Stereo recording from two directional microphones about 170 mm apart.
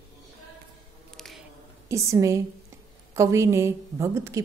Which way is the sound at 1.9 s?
20° right (ahead or behind).